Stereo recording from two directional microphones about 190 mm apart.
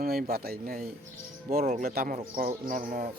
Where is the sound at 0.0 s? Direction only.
50° right (ahead or behind).